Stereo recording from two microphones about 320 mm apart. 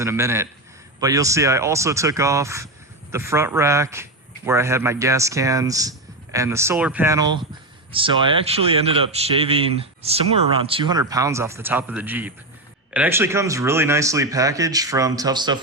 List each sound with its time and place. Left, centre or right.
0.0 s a man's voice: centre